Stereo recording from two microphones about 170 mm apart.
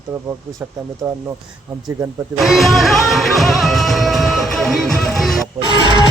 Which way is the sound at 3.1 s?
Centre (ahead or behind).